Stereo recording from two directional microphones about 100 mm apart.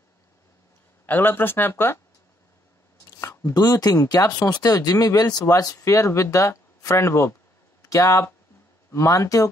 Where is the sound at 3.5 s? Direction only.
40° left (ahead or behind).